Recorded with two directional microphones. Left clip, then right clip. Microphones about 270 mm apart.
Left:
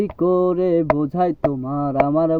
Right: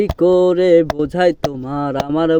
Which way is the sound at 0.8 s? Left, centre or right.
Right.